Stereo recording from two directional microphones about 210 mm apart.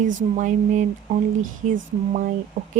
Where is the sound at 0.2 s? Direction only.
35° right (ahead or behind).